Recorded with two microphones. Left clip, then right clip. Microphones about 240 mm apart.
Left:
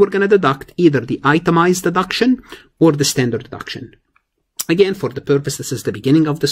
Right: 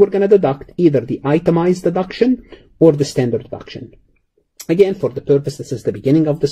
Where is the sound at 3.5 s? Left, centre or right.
Left.